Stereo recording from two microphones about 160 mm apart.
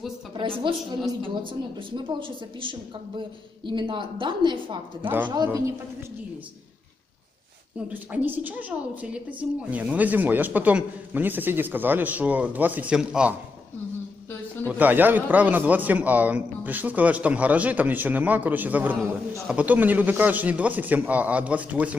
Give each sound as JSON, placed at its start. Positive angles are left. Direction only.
{"t": 0.3, "sound": "a woman's voice", "side_deg": -35}
{"t": 2.0, "sound": "a woman's voice", "side_deg": -30}
{"t": 5.0, "sound": "a man's voice", "side_deg": -10}
{"t": 7.9, "sound": "a man's voice", "side_deg": -10}
{"t": 14.7, "sound": "a man's voice", "side_deg": -10}